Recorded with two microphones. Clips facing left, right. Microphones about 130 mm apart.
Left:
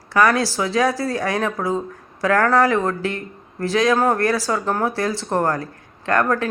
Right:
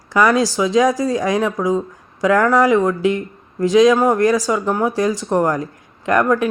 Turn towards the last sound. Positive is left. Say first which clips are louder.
# right 4 dB
turn(degrees=-15)  # may be behind; listen again after turning